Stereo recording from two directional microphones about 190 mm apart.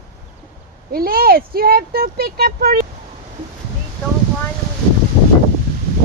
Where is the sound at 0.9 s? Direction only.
50° right (ahead or behind).